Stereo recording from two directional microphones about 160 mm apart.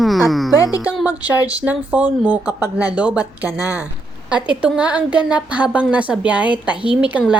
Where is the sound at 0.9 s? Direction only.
5° right (ahead or behind).